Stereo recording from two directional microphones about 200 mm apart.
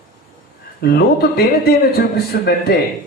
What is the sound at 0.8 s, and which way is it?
A man's voice, 50° left (ahead or behind).